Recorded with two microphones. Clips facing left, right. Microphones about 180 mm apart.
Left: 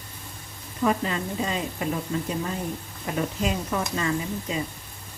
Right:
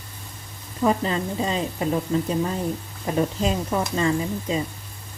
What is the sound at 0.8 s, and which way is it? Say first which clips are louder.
Speech: right 3 dB; 30° right (ahead or behind).